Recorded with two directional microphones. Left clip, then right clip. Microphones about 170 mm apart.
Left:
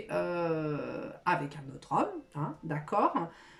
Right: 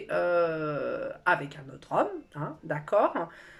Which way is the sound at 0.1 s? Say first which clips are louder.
Right 6 dB; 30° left (ahead or behind).